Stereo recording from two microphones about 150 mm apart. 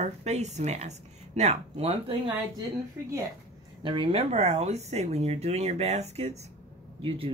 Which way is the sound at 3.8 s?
35° right (ahead or behind).